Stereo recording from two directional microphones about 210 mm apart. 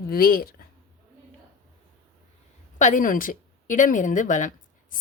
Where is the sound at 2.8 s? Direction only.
40° left (ahead or behind).